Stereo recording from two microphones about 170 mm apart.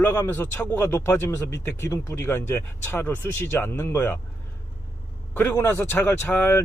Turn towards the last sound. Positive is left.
turn(degrees=10)  # may be behind; listen again after turning